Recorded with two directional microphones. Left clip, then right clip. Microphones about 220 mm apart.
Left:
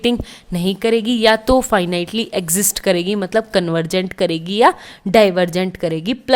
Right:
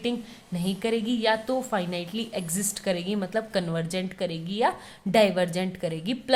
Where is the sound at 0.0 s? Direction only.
45° left (ahead or behind).